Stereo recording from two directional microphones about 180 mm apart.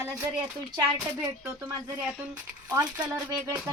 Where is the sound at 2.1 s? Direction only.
5° right (ahead or behind).